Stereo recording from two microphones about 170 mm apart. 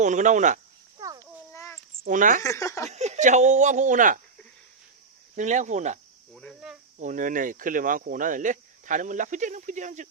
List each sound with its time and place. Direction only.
0.0 s speech: 45° right (ahead or behind)
0.9 s a sound: 25° right (ahead or behind)
1.5 s a sound: 15° left (ahead or behind)
2.0 s speech: 50° right (ahead or behind)
2.4 s speech: 20° left (ahead or behind)
2.9 s speech: 40° right (ahead or behind)
5.4 s speech: 45° right (ahead or behind)
6.3 s speech: centre (ahead or behind)
7.0 s speech: 50° right (ahead or behind)